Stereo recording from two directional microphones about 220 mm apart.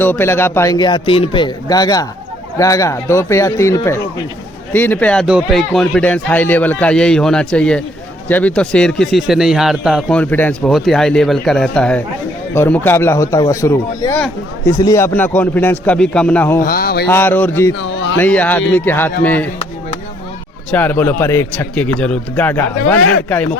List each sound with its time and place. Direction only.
0.0 s a man's voice: 10° left (ahead or behind)
16.6 s mantra: 40° left (ahead or behind)
17.1 s a man's voice: 10° left (ahead or behind)
17.7 s a sound: 55° left (ahead or behind)
18.2 s a man's voice: 5° left (ahead or behind)
20.7 s a man's voice: 10° left (ahead or behind)